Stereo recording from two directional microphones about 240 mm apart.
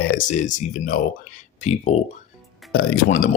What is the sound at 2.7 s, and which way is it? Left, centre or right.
Speech, left.